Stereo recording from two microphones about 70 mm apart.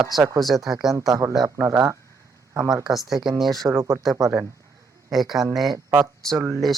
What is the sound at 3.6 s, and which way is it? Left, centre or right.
Speech, right.